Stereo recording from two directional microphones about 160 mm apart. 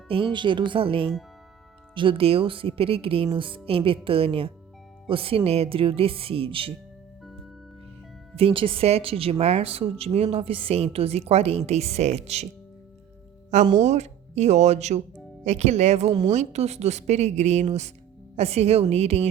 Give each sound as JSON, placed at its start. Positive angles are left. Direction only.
{"t": 0.1, "sound": "a woman's voice", "side_deg": -30}
{"t": 8.4, "sound": "a woman's voice", "side_deg": -35}
{"t": 13.7, "sound": "a woman's voice", "side_deg": -45}